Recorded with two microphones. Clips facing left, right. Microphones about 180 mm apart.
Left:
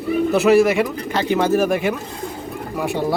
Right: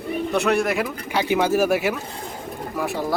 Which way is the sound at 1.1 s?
10° right (ahead or behind).